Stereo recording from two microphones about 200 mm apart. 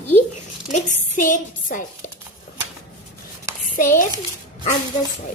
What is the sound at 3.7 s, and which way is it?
Dishes, 40° left (ahead or behind).